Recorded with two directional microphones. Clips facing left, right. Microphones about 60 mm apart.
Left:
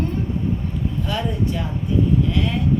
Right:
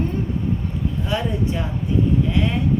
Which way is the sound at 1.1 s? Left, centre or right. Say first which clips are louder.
Right 1 dB; centre.